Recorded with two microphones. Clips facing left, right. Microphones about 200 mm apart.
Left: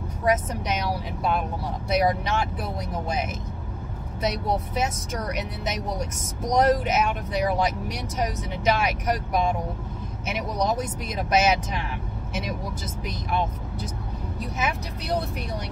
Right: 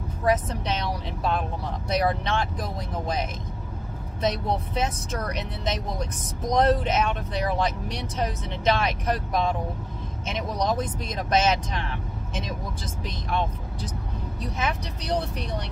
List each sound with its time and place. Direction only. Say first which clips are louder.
0.2 s speech: even; 10° left (ahead or behind)
4.2 s speech: even; 10° left (ahead or behind)
14.4 s speech: left 1 dB; 5° left (ahead or behind)